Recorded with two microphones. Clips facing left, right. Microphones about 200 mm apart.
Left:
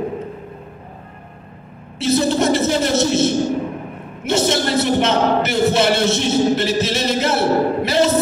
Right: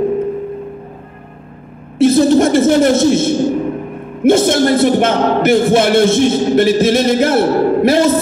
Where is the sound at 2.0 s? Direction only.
50° right (ahead or behind).